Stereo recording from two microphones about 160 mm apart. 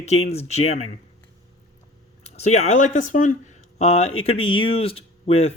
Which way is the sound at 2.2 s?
40° left (ahead or behind).